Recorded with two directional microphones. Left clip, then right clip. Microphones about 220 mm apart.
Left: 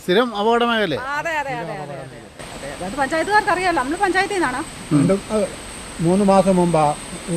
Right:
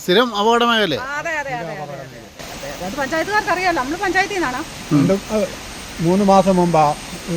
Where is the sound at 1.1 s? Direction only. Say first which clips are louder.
Even; 25° left (ahead or behind).